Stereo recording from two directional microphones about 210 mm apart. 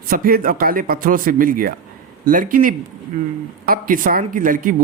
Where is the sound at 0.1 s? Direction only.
45° right (ahead or behind).